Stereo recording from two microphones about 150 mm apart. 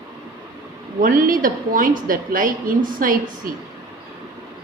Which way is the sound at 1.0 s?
65° right (ahead or behind).